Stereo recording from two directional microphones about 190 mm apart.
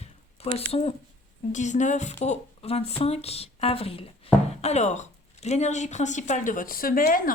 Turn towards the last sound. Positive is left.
turn(degrees=45)  # may be behind; listen again after turning